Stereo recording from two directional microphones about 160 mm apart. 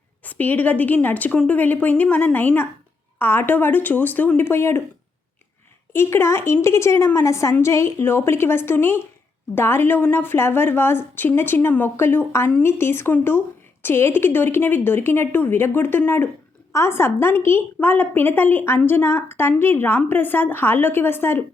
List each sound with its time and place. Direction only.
0.2 s a woman's voice: 10° left (ahead or behind)
5.9 s a woman's voice: 15° left (ahead or behind)